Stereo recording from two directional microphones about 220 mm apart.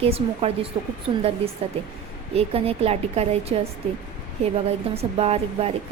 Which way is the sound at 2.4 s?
25° right (ahead or behind).